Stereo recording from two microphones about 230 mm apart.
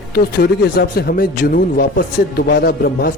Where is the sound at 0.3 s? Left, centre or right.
Left.